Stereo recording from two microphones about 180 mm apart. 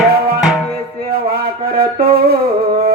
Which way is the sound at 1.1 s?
55° right (ahead or behind).